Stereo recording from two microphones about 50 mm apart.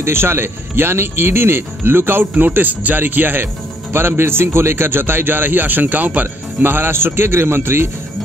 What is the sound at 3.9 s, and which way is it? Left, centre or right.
A man's voice, right.